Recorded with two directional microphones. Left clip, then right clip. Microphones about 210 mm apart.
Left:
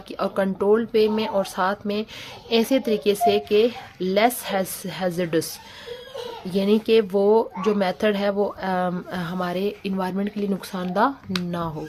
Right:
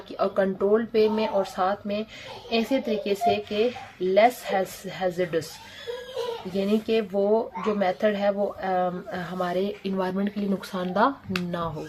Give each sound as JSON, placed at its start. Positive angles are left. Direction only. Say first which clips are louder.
{"t": 0.2, "sound": "speech", "louder": "even", "side_deg": 35}
{"t": 6.5, "sound": "speech", "louder": "left 7 dB", "side_deg": 40}